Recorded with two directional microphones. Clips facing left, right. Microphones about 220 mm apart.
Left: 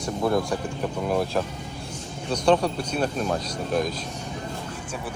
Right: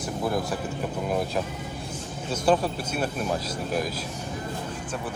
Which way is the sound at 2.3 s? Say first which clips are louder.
Left 2 dB; 5° right (ahead or behind).